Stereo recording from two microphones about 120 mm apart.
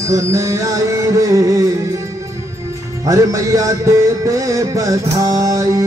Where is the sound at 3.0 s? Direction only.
25° right (ahead or behind).